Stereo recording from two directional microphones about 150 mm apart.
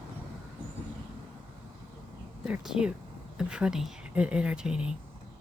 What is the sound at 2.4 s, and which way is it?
Speech, 5° right (ahead or behind).